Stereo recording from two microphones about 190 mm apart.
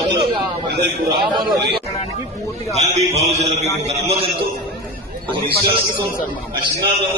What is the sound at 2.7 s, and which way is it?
Mantra, 35° right (ahead or behind).